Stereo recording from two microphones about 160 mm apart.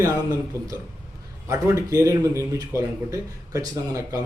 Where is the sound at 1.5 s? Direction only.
20° right (ahead or behind).